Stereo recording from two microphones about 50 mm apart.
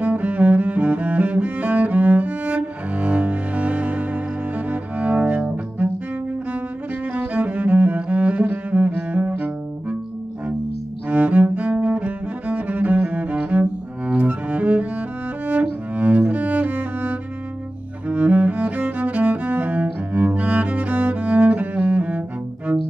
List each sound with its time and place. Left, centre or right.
0.0 s cello: right
7.2 s cello: right
9.3 s double bass: right
11.1 s cello: right